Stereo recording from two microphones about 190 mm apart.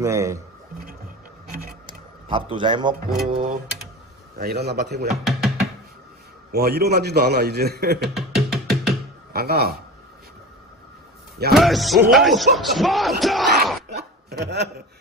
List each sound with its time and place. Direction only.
0.0 s speech: 15° right (ahead or behind)
1.9 s a sound: 25° right (ahead or behind)
3.3 s mechanisms: 30° right (ahead or behind)
4.4 s a man's voice: 55° right (ahead or behind)
5.1 s music: centre (ahead or behind)
6.5 s a man's voice: 55° right (ahead or behind)
8.1 s music: centre (ahead or behind)
9.3 s speech: 55° right (ahead or behind)
11.5 s music: centre (ahead or behind)
12.5 s speech: centre (ahead or behind)
13.8 s a sound: 60° right (ahead or behind)